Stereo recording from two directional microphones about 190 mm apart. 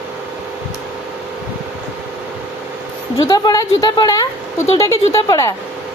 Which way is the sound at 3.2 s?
20° left (ahead or behind).